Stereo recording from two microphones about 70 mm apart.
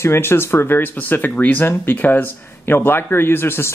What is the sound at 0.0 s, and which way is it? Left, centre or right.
Speech, left.